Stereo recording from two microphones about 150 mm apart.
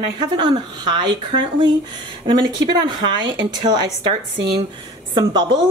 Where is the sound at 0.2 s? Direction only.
30° right (ahead or behind).